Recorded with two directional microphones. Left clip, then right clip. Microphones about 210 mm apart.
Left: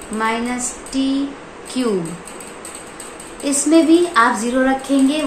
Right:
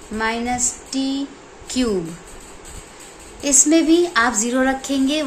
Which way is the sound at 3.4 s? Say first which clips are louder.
Left 1 dB; 45° right (ahead or behind).